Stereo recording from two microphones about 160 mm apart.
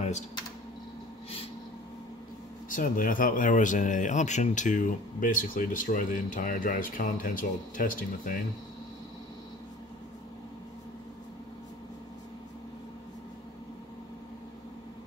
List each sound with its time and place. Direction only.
2.7 s speech: 55° left (ahead or behind)